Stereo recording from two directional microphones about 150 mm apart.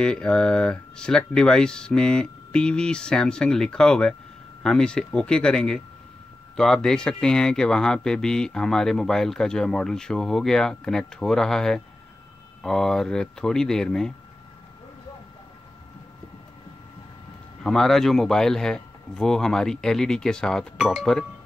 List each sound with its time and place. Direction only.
0.0 s speech: 5° left (ahead or behind)
17.6 s speech: centre (ahead or behind)